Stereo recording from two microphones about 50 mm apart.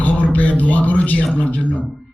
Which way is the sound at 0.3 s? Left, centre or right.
Left.